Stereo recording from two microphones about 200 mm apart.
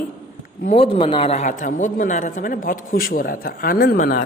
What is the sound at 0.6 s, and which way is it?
A man's voice, 30° left (ahead or behind).